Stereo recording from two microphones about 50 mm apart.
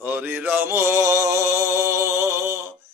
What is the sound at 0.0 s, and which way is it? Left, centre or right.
Mantra, right.